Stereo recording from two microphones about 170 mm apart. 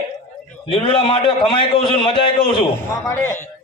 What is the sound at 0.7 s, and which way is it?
A man's voice, 30° left (ahead or behind).